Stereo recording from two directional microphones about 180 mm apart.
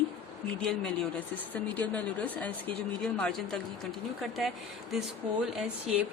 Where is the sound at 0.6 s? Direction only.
5° left (ahead or behind).